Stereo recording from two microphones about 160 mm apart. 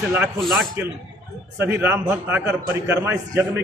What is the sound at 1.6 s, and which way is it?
A man's voice, 15° right (ahead or behind).